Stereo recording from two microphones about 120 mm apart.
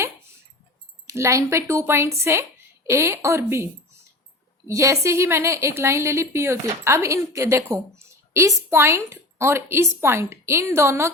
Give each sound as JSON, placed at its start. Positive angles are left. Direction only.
{"t": 1.0, "sound": "a woman's voice", "side_deg": -25}